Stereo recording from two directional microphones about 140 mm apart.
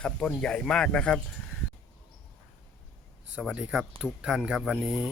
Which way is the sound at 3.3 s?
5° right (ahead or behind).